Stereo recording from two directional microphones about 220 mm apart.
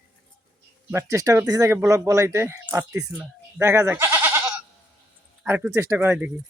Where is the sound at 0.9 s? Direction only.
15° right (ahead or behind).